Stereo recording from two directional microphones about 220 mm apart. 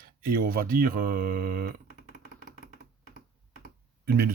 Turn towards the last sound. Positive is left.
turn(degrees=-45)  # may be behind; listen again after turning